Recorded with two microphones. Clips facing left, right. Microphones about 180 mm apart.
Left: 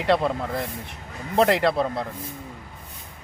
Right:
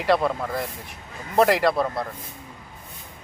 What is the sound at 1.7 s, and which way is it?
Speech, 25° left (ahead or behind).